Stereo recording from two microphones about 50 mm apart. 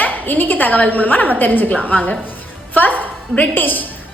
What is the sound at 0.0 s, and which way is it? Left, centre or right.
A woman's voice, left.